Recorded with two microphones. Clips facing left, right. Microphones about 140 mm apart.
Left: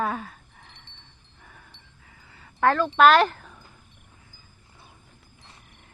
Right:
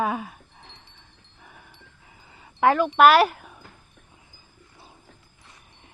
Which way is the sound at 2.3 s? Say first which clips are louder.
Right 2 dB; 15° right (ahead or behind).